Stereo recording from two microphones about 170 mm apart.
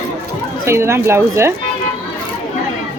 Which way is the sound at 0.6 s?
15° right (ahead or behind).